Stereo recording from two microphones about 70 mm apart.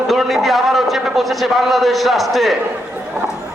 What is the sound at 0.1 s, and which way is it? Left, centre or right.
A man's voice, centre.